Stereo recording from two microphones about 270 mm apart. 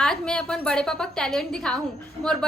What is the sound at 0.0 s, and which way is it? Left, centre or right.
A woman's voice, centre.